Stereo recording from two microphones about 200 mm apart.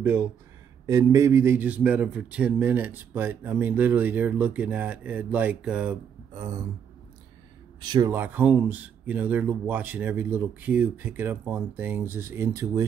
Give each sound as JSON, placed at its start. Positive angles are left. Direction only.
{"t": 0.0, "sound": "a man's voice", "side_deg": -10}
{"t": 6.3, "sound": "a man's voice", "side_deg": -15}
{"t": 7.8, "sound": "a man's voice", "side_deg": -20}